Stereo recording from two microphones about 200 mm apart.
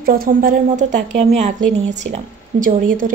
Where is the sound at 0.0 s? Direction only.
45° right (ahead or behind).